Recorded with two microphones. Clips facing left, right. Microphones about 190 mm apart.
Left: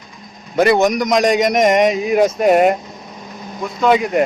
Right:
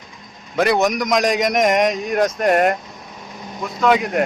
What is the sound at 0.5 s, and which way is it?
A man's voice, centre (ahead or behind).